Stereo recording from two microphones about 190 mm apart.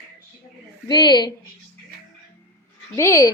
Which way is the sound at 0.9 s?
20° left (ahead or behind).